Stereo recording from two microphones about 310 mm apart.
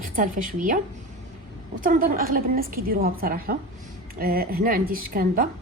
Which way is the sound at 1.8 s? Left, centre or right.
Right.